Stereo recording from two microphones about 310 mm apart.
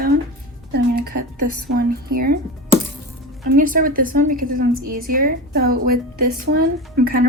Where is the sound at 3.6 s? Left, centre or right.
Right.